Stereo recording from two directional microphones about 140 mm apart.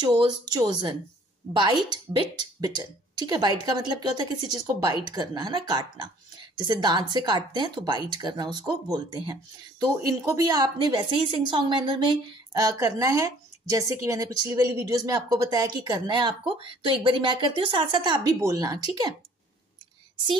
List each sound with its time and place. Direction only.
0.0 s a woman's voice: 35° right (ahead or behind)
12.5 s speech: 25° right (ahead or behind)